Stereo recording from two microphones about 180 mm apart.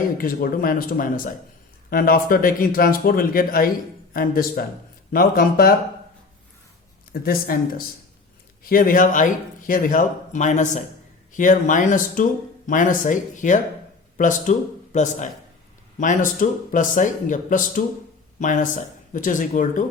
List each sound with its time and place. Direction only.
0.2 s speech: 55° left (ahead or behind)
7.1 s speech: 55° left (ahead or behind)